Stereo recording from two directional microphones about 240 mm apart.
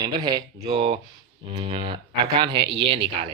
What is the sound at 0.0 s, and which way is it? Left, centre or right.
Speech, centre.